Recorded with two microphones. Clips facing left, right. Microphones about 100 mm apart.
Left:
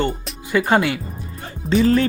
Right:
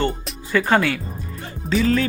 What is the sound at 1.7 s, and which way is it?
Speech, 30° left (ahead or behind).